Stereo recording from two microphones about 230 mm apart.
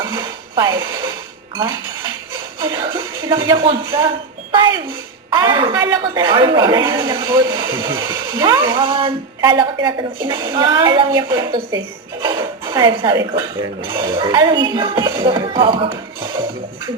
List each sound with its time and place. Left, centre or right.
0.1 s music: centre
2.6 s a woman's voice: centre